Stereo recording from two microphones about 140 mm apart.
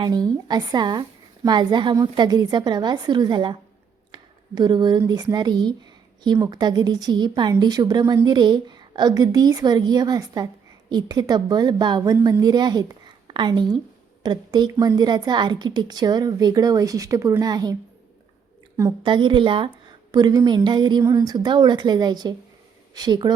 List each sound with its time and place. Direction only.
0.0 s a woman's voice: 30° right (ahead or behind)
19.0 s a woman's voice: 35° right (ahead or behind)